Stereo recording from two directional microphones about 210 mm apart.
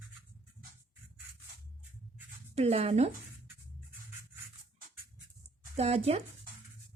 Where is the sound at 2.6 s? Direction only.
30° right (ahead or behind).